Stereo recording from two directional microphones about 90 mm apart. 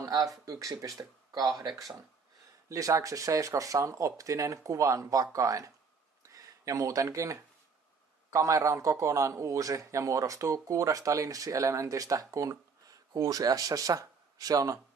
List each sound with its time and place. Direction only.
0.0 s a man's voice: 40° right (ahead or behind)
2.7 s a man's voice: 40° right (ahead or behind)